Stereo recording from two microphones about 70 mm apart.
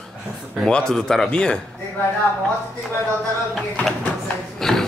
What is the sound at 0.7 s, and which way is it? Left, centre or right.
Speech, centre.